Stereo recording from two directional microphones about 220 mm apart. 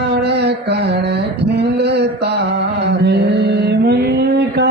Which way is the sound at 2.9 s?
50° right (ahead or behind).